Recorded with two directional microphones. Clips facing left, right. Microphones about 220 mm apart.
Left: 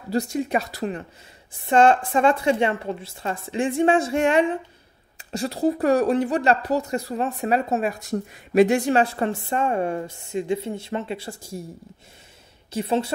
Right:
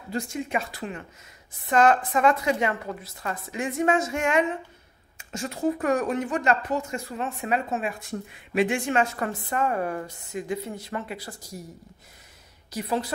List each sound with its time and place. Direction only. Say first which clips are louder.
0.1 s a woman's voice: left 6 dB; 40° left (ahead or behind)
12.7 s a woman's voice: left 5 dB; 25° left (ahead or behind)